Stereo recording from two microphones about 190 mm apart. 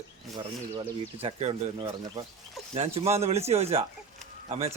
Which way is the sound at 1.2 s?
35° right (ahead or behind).